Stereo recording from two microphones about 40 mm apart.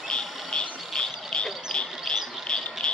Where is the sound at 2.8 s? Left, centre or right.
Centre.